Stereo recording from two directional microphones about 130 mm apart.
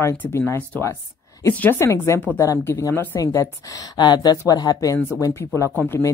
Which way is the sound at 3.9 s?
35° left (ahead or behind).